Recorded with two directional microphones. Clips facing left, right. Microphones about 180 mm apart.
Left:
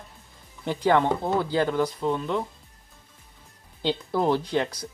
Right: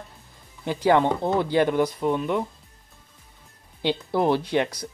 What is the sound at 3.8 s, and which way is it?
Speech, 10° right (ahead or behind).